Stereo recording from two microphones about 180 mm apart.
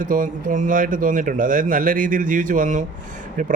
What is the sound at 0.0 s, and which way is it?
A man's voice, 50° right (ahead or behind).